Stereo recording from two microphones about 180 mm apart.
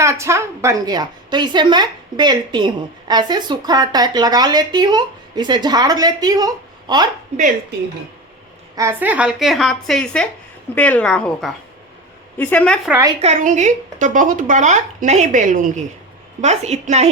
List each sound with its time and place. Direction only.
0.0 s a woman's voice: 15° right (ahead or behind)
8.7 s a woman's voice: 15° right (ahead or behind); by 12.9 s 5° left (ahead or behind)
13.2 s a woman's voice: 40° right (ahead or behind)